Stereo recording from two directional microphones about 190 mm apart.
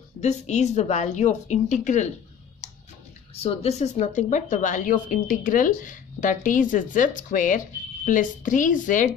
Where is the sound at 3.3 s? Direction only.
35° left (ahead or behind).